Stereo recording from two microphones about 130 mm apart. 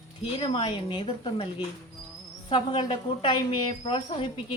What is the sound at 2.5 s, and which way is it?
Speech, 40° left (ahead or behind).